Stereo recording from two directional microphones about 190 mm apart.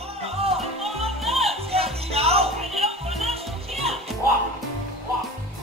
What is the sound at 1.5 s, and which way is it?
Music, 30° right (ahead or behind).